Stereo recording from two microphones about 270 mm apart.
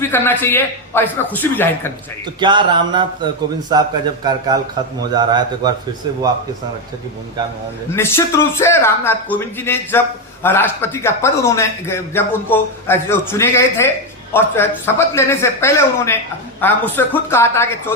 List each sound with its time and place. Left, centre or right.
0.0 s a man's voice: centre
2.4 s a man's voice: centre
7.9 s a man's voice: centre